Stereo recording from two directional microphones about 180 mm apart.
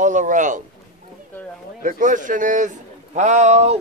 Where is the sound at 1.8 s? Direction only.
45° right (ahead or behind).